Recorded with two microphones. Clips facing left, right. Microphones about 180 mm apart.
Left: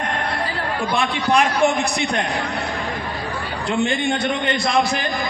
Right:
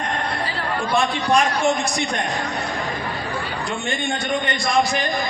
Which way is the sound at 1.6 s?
60° left (ahead or behind).